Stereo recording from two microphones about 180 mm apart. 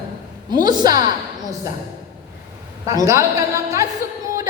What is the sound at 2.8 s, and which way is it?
A woman's voice, 15° right (ahead or behind).